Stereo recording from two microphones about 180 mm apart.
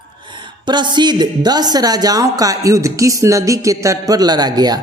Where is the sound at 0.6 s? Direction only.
25° right (ahead or behind).